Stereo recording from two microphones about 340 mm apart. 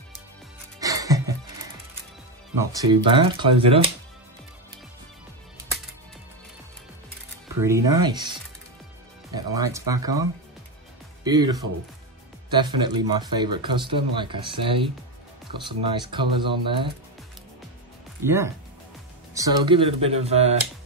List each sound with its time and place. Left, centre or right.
0.7 s music: centre
2.6 s speech: centre
7.6 s speech: centre
11.2 s speech: centre
18.2 s speech: centre